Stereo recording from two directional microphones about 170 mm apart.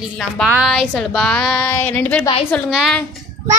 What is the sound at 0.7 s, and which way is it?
Speech, centre (ahead or behind).